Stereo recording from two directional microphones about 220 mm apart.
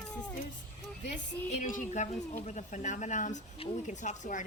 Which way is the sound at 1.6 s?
35° left (ahead or behind).